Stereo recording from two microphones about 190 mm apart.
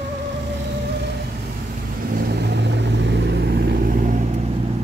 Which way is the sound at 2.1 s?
60° right (ahead or behind).